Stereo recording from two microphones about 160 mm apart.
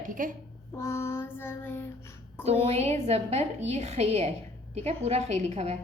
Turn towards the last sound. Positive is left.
turn(degrees=-40)  # may be behind; listen again after turning